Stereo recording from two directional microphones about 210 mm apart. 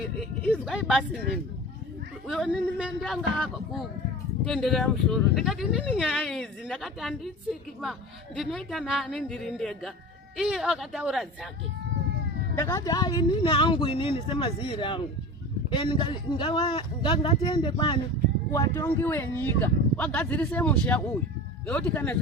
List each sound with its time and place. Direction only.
0.6 s speech: 5° right (ahead or behind)
2.2 s speech: centre (ahead or behind)
8.4 s speech: centre (ahead or behind)
12.5 s speech: 15° left (ahead or behind)